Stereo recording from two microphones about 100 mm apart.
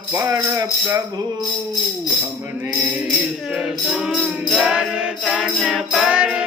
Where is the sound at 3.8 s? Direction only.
5° right (ahead or behind).